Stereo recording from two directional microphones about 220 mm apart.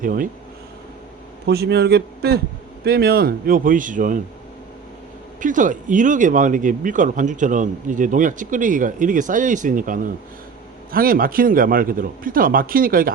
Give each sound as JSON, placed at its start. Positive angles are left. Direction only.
{"t": 0.0, "sound": "speech", "side_deg": -40}
{"t": 1.5, "sound": "a man's voice", "side_deg": -45}
{"t": 5.4, "sound": "speech", "side_deg": -35}